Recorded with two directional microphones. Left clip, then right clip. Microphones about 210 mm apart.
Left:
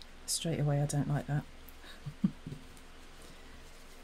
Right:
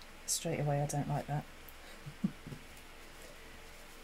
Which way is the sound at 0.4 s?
15° left (ahead or behind).